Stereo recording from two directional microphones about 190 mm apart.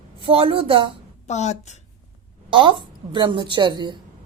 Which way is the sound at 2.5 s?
25° right (ahead or behind).